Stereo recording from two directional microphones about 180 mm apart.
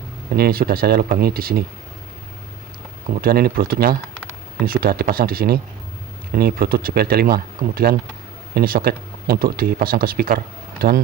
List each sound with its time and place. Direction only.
0.3 s speech: 60° right (ahead or behind)
3.2 s speech: 55° right (ahead or behind)